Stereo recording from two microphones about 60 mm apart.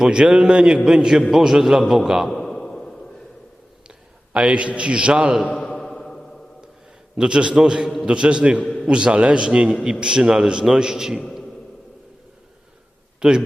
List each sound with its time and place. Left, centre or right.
0.0 s a man's voice: centre
1.8 s a man's voice: centre
2.3 s a sound: centre
3.8 s a sound: centre
4.8 s a man's voice: centre
5.6 s music: centre
7.2 s a man's voice: centre
13.1 s a man's voice: centre